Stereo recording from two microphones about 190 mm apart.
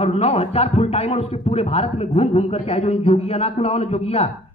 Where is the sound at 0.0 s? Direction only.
30° left (ahead or behind).